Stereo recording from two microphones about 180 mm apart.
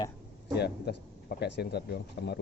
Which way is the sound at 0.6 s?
65° left (ahead or behind).